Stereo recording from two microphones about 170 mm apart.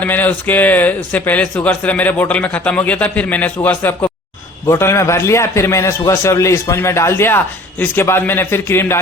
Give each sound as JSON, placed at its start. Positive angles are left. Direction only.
{"t": 0.0, "sound": "a man's voice", "side_deg": 10}